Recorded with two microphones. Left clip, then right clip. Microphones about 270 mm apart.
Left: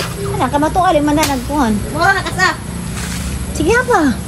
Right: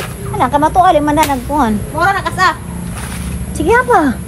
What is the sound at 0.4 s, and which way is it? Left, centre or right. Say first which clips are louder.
Speech: right 4 dB; right.